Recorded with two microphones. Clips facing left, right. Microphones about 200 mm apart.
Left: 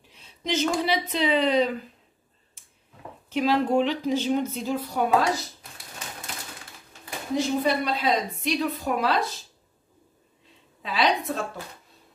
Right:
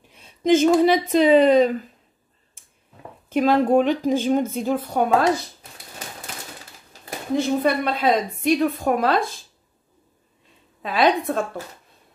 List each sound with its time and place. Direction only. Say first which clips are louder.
0.1 s a woman's voice: right 11 dB; 50° right (ahead or behind)
3.3 s a woman's voice: right 5 dB; 50° right (ahead or behind)
7.3 s a woman's voice: right 4 dB; 55° right (ahead or behind)
10.8 s a woman's voice: right 5 dB; 50° right (ahead or behind)